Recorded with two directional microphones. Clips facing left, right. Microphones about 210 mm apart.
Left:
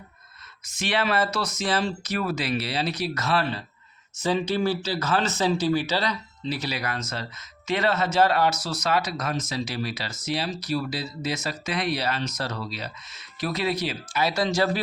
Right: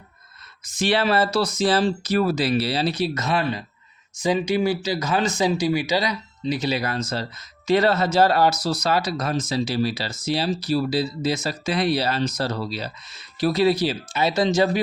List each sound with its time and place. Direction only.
0.6 s speech: 35° right (ahead or behind)